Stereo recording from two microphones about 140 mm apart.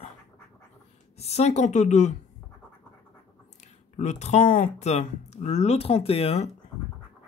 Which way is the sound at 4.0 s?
60° left (ahead or behind).